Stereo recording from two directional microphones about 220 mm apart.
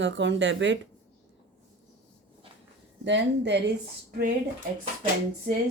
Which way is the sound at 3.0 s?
55° right (ahead or behind).